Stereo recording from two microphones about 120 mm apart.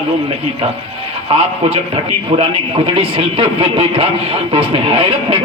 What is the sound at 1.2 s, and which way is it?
Speech, 50° right (ahead or behind).